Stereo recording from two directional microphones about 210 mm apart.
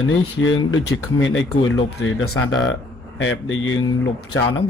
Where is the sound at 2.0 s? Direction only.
80° left.